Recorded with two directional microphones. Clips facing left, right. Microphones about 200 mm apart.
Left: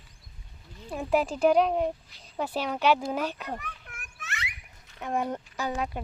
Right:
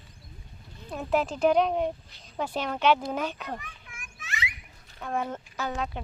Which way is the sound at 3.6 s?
60° left (ahead or behind).